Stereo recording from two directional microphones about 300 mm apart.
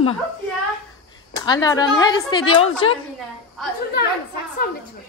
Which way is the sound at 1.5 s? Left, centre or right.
Centre.